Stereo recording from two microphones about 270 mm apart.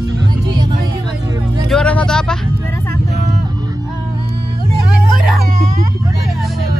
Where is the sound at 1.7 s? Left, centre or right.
Centre.